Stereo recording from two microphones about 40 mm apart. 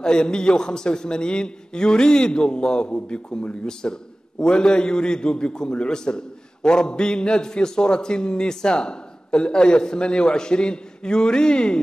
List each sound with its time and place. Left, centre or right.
0.0 s a man's voice: left